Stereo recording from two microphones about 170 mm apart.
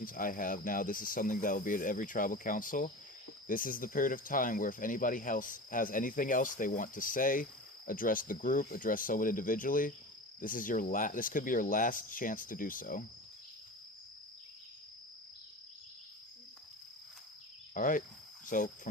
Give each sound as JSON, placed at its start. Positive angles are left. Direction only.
{"t": 0.0, "sound": "speech", "side_deg": 55}
{"t": 17.7, "sound": "speech", "side_deg": 50}
{"t": 18.4, "sound": "cricket", "side_deg": 50}